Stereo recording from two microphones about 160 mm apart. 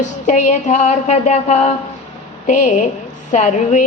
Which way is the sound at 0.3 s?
50° left (ahead or behind).